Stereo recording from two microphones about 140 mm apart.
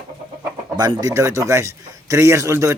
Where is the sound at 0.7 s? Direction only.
30° right (ahead or behind).